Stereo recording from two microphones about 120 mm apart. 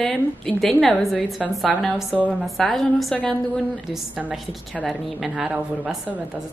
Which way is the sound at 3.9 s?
5° right (ahead or behind).